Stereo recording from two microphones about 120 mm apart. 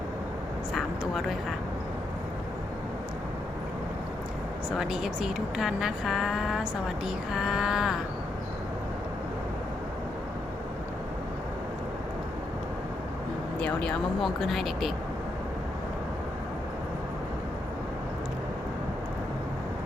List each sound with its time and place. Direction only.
0.7 s speech: centre (ahead or behind)
4.8 s speech: 5° right (ahead or behind)
13.6 s speech: 10° left (ahead or behind)